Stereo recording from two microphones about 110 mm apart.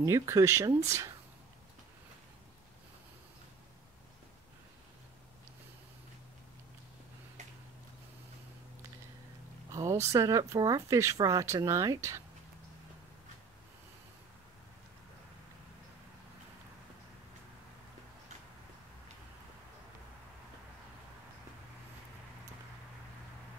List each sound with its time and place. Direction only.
0.0 s speech: 30° right (ahead or behind)
9.7 s speech: 30° right (ahead or behind)